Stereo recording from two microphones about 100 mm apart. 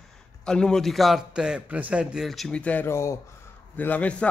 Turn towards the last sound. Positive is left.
turn(degrees=15)  # may be behind; listen again after turning